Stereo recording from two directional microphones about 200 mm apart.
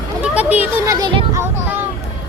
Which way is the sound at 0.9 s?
15° right (ahead or behind).